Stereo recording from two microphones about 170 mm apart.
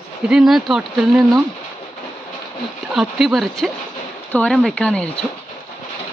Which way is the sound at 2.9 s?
Centre (ahead or behind).